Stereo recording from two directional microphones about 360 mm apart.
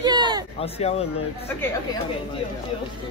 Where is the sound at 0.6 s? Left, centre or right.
Centre.